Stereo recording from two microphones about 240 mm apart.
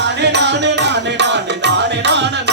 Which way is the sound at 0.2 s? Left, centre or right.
Right.